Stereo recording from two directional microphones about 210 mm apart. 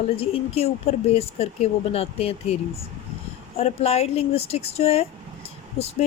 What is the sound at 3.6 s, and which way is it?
A woman's voice, 30° left (ahead or behind).